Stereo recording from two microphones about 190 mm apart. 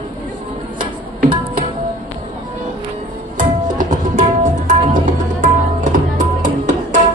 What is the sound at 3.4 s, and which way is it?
Tabla, 40° right (ahead or behind).